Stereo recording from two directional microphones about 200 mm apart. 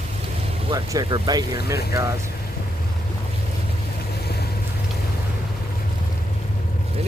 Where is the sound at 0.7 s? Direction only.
20° right (ahead or behind).